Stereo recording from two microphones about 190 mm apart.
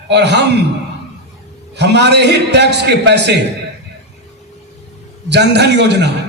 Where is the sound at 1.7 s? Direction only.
65° right (ahead or behind).